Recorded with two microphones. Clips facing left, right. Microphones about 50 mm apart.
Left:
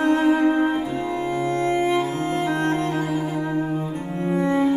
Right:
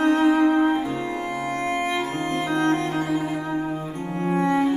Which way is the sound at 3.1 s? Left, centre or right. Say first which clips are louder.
Even; right.